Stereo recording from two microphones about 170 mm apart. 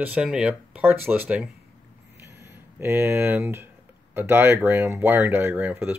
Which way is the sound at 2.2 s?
15° right (ahead or behind).